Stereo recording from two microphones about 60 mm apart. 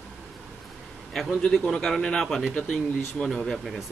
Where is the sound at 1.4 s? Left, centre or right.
Centre.